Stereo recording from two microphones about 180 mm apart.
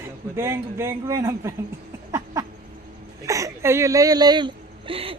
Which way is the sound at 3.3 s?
15° right (ahead or behind).